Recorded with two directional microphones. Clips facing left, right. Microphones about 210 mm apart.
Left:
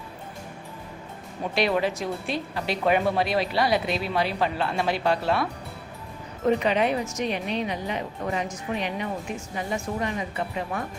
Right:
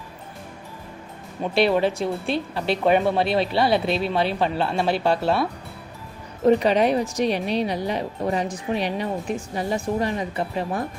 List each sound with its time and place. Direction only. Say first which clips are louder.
1.5 s speech: right 5 dB; 30° right (ahead or behind)